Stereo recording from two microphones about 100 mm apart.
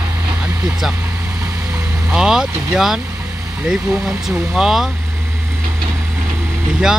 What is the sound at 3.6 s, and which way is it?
Speech, 5° right (ahead or behind).